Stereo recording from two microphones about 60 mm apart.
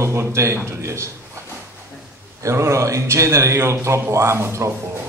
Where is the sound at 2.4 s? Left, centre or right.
Right.